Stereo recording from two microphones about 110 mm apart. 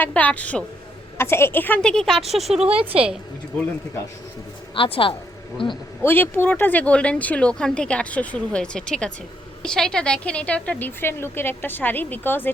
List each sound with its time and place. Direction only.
0.0 s a woman's voice: 15° left (ahead or behind); by 2.6 s centre (ahead or behind)
4.7 s a man's voice: 55° left (ahead or behind)
6.0 s speech: 20° left (ahead or behind)